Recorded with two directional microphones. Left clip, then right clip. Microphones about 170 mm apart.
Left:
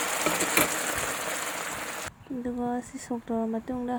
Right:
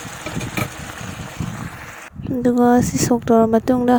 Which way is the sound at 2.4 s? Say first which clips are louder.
Right 17 dB; 65° right (ahead or behind).